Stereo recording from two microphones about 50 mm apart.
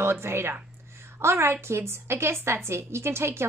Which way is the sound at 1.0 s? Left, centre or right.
Right.